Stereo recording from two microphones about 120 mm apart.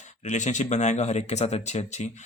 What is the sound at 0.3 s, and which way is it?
Speech, 85° left.